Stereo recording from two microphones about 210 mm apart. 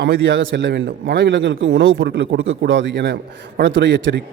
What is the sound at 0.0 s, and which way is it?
A man's voice, 50° right (ahead or behind).